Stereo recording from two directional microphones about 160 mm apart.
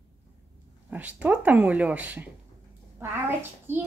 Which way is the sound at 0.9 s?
10° right (ahead or behind).